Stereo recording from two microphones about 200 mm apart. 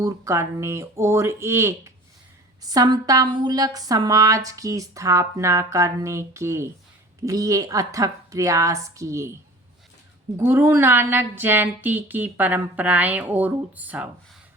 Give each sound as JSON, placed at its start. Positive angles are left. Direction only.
{"t": 0.0, "sound": "a woman's voice", "side_deg": -15}
{"t": 10.3, "sound": "a woman's voice", "side_deg": -10}